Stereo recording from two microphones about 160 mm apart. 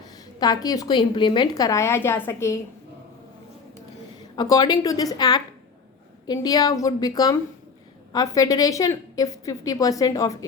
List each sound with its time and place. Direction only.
0.3 s a woman's voice: 25° left (ahead or behind)
4.4 s a woman's voice: 25° left (ahead or behind)